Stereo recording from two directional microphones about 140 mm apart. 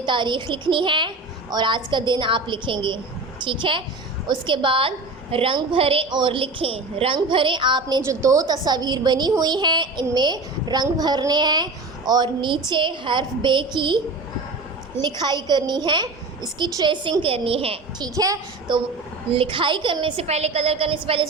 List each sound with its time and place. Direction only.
0.0 s a woman's voice: 35° right (ahead or behind)
8.0 s a woman's voice: 20° right (ahead or behind)
15.0 s a woman's voice: 30° right (ahead or behind)
18.0 s a woman's voice: 25° right (ahead or behind)
19.3 s a woman's voice: 40° right (ahead or behind)